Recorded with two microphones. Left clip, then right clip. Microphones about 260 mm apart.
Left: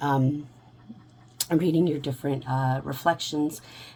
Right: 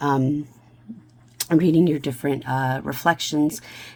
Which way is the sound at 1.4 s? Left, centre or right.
Right.